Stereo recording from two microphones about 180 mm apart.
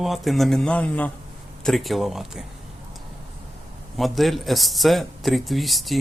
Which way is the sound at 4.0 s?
Centre (ahead or behind).